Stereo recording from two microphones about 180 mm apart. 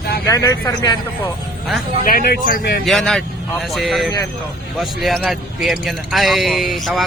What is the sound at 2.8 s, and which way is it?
Speech, centre (ahead or behind).